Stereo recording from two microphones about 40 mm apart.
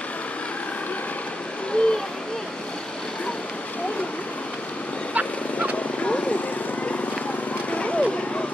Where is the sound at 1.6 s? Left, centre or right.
Left.